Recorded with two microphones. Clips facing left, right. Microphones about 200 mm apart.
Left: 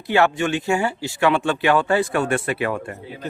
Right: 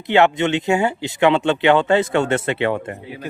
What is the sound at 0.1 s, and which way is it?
Speech, 20° right (ahead or behind).